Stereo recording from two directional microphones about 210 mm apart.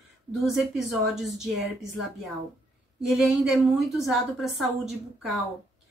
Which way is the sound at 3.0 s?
5° right (ahead or behind).